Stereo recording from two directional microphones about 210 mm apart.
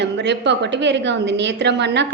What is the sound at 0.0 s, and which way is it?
A woman's voice, 55° right (ahead or behind).